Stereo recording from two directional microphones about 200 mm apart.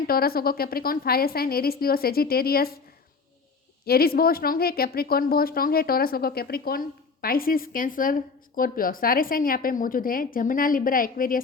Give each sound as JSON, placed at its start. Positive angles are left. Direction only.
{"t": 0.1, "sound": "a woman's voice", "side_deg": 50}
{"t": 3.8, "sound": "a woman's voice", "side_deg": 50}